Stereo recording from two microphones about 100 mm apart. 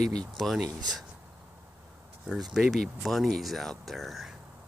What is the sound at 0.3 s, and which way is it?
Speech, centre (ahead or behind).